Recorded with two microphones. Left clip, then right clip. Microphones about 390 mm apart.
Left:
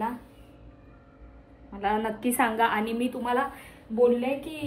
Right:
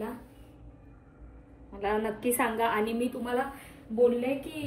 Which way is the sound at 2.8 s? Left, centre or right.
Centre.